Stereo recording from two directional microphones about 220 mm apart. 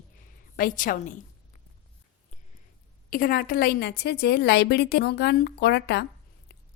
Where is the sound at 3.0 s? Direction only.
40° left (ahead or behind).